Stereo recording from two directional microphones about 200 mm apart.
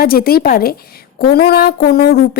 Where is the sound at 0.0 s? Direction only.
50° left (ahead or behind).